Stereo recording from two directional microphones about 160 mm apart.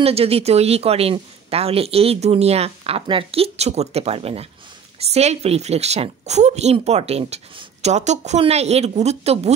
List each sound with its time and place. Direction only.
0.0 s speech: 40° right (ahead or behind)